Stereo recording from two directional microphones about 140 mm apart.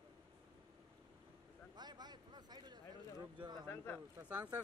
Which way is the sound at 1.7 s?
30° right (ahead or behind).